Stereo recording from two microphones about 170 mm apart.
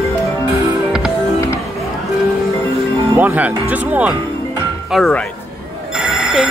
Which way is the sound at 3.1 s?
10° right (ahead or behind).